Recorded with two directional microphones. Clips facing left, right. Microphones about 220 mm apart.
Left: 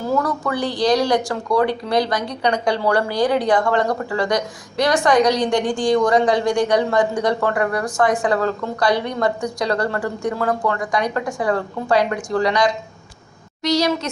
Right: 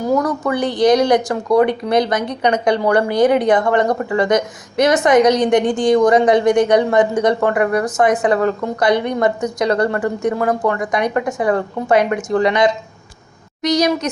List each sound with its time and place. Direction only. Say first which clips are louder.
0.0 s a woman's voice: right 4 dB; 20° right (ahead or behind)